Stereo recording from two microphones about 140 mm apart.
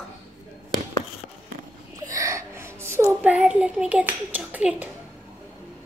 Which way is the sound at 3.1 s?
10° right (ahead or behind).